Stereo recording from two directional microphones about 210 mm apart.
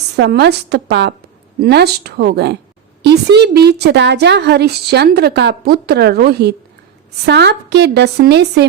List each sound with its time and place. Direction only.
0.2 s a woman's voice: 50° right (ahead or behind)